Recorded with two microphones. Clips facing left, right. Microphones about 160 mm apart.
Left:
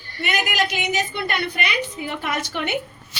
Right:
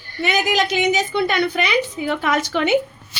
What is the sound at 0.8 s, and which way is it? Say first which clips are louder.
A woman's voice: right 6 dB; 90° right.